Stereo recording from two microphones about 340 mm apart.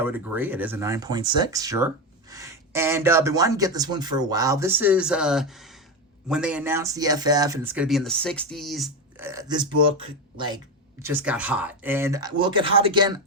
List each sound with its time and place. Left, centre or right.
0.0 s speech: centre